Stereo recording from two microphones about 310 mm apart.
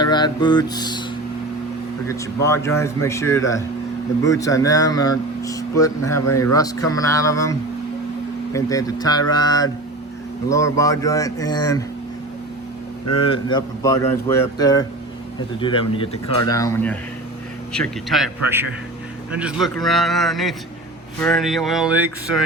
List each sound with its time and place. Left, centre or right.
0.0 s speech: centre
2.0 s speech: centre
8.5 s speech: centre
13.1 s speech: centre